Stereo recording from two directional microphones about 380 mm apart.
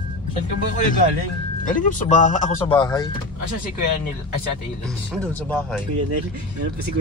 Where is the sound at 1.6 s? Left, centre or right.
Centre.